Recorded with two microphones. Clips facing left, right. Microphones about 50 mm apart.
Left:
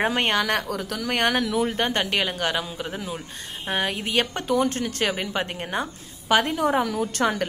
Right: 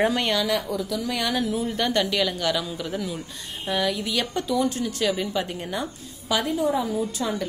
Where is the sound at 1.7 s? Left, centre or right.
Left.